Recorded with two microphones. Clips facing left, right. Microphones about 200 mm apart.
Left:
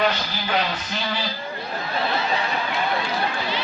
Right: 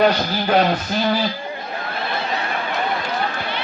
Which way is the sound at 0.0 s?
45° right (ahead or behind).